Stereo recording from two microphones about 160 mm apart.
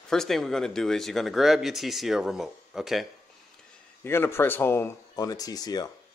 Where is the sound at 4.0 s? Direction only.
15° left (ahead or behind).